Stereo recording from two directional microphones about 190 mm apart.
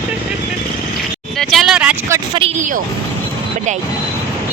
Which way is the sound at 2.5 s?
45° right (ahead or behind).